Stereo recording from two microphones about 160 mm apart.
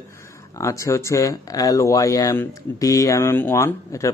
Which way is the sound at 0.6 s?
20° left (ahead or behind).